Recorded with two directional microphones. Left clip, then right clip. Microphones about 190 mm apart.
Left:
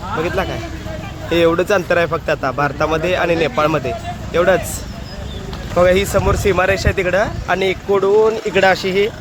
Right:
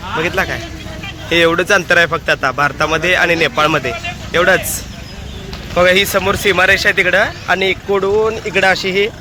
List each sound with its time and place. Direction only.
0.2 s a man's voice: centre (ahead or behind)
5.7 s a man's voice: 5° left (ahead or behind)